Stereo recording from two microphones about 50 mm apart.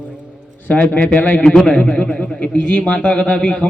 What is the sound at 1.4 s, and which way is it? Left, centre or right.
A man's voice, centre.